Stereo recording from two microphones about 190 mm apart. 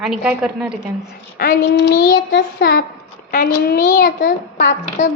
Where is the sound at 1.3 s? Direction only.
55° left (ahead or behind).